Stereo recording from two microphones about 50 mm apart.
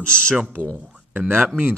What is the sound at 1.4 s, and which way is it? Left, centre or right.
Speech, right.